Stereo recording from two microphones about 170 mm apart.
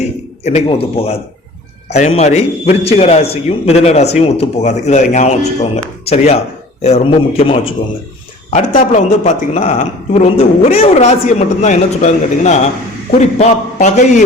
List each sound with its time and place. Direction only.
0.4 s a man's voice: 35° left (ahead or behind)
8.4 s a man's voice: 45° left (ahead or behind)